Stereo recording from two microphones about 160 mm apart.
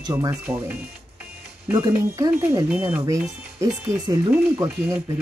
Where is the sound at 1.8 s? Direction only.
20° right (ahead or behind).